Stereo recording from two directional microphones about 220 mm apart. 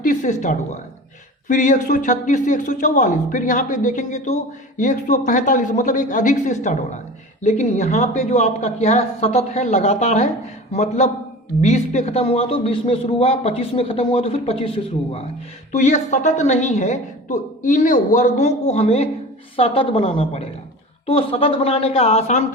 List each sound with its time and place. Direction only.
0.0 s a woman's voice: 35° left (ahead or behind)
15.7 s a woman's voice: 35° left (ahead or behind)